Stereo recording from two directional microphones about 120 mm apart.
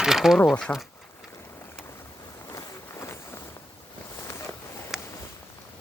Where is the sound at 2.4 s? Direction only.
25° left (ahead or behind).